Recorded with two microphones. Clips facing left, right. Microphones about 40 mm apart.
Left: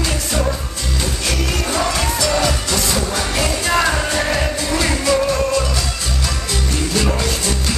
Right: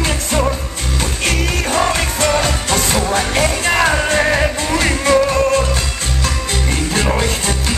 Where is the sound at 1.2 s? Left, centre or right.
Right.